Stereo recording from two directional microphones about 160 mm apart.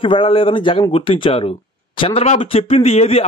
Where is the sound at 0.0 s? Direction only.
35° left (ahead or behind).